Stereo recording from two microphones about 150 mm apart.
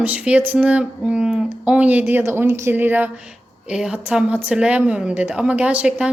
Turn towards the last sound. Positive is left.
turn(degrees=-5)  # may be behind; listen again after turning